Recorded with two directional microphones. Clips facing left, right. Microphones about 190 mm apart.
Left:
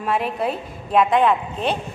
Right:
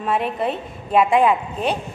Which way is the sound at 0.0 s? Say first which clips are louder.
Right 1 dB; centre (ahead or behind).